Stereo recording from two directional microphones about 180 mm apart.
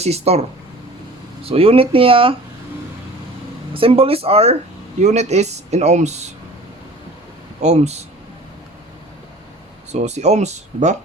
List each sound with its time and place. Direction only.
0.0 s speech: 35° right (ahead or behind)
1.5 s speech: 30° right (ahead or behind)
3.8 s speech: 30° right (ahead or behind)
7.6 s speech: 35° right (ahead or behind)
9.9 s speech: 40° right (ahead or behind)